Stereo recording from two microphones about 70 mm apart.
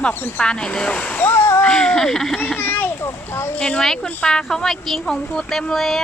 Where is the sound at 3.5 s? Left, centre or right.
Centre.